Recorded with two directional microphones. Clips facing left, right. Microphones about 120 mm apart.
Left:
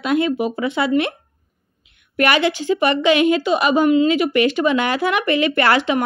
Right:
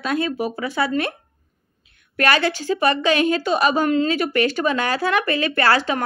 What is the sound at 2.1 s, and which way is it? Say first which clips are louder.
A woman's voice: left 2 dB; 15° left (ahead or behind).